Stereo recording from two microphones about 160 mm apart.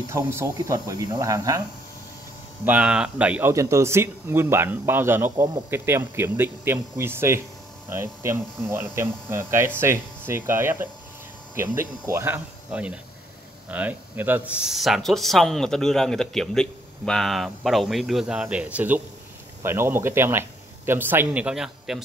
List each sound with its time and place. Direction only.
0.3 s speech: 20° right (ahead or behind)
2.6 s speech: 10° right (ahead or behind)
5.3 s speech: 25° right (ahead or behind)
5.7 s speech: 15° right (ahead or behind)